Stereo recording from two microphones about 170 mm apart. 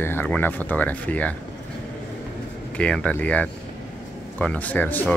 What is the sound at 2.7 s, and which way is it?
Speech, 5° left (ahead or behind).